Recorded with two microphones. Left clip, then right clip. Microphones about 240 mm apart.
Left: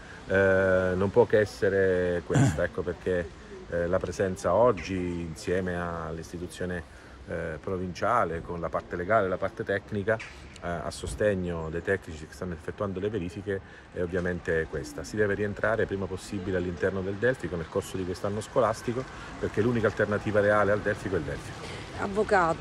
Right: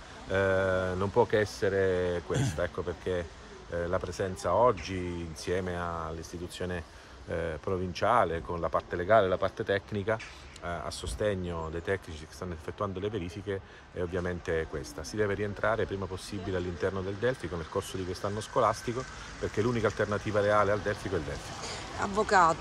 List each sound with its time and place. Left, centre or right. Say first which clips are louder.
0.3 s speech: left 5 dB; centre
7.2 s speech: even; right; by 22.6 s centre